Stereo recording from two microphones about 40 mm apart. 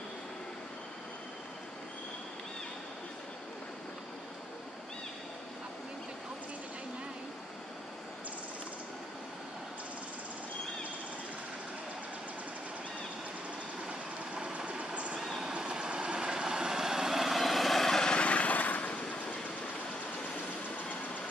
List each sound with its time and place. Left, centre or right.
13.8 s vehicle: right
15.1 s vehicle: centre
15.4 s vehicle: right; by 18.1 s centre
18.1 s vehicle: left